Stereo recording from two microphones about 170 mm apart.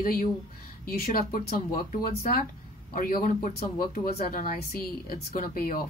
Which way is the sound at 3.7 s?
55° left (ahead or behind).